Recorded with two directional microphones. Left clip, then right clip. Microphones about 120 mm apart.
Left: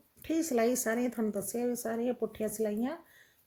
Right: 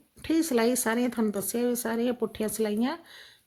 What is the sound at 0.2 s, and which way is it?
Speech, 30° right (ahead or behind).